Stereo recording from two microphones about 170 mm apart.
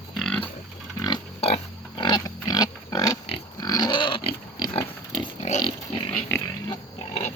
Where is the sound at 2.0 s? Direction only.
25° left (ahead or behind).